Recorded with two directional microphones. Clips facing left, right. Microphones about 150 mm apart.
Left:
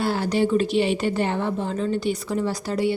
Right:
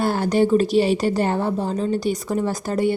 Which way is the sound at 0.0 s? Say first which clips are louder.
Right 3 dB; 45° right (ahead or behind).